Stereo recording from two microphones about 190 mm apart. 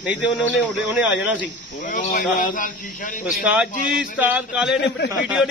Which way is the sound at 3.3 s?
5° right (ahead or behind).